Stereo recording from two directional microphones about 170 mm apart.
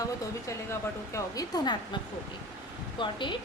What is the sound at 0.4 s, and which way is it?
Speech, 20° left (ahead or behind).